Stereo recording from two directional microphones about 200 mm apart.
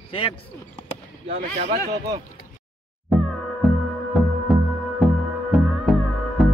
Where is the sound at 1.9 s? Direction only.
20° right (ahead or behind).